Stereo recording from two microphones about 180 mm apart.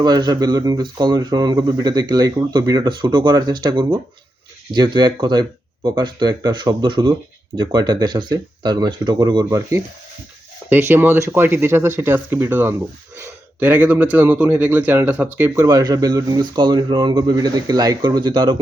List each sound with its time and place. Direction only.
0.0 s a man's voice: 20° right (ahead or behind)